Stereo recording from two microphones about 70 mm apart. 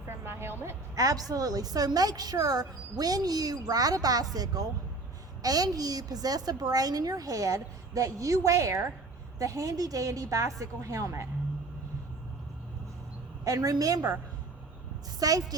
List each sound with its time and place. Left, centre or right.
0.1 s a woman's voice: right
0.9 s a woman's voice: right
5.4 s a woman's voice: right
13.4 s a woman's voice: right
15.2 s a woman's voice: right